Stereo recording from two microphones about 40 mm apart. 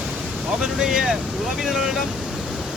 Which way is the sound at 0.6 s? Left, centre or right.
Centre.